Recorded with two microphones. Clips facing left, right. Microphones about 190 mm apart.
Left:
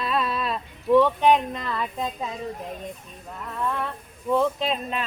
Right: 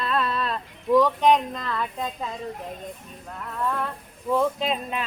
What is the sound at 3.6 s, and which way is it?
Speech, centre (ahead or behind).